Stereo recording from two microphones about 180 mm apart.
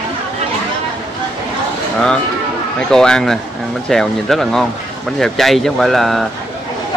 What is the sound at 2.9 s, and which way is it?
Speech, 5° left (ahead or behind).